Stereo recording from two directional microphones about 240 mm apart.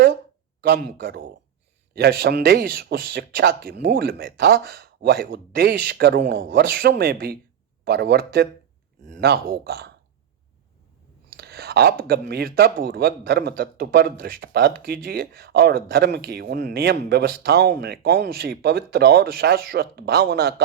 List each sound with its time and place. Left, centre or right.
0.6 s speech: right
11.3 s speech: right